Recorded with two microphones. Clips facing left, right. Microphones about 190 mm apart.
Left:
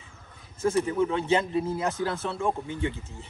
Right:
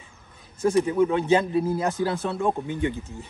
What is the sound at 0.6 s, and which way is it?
Speech, 15° right (ahead or behind).